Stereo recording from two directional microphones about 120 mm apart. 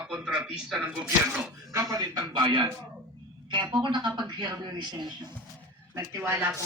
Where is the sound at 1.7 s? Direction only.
30° right (ahead or behind).